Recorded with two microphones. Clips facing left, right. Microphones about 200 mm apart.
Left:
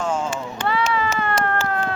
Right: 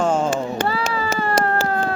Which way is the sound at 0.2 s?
35° right (ahead or behind).